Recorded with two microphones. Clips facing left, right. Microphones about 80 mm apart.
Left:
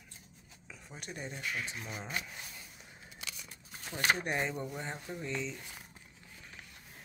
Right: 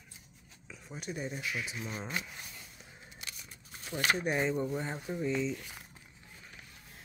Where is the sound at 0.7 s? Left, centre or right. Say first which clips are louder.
Right 5 dB; centre.